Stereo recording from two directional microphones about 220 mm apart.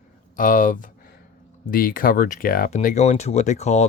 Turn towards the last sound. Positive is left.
turn(degrees=30)  # may be behind; listen again after turning